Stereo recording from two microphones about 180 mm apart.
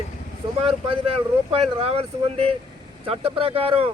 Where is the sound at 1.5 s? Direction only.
30° right (ahead or behind).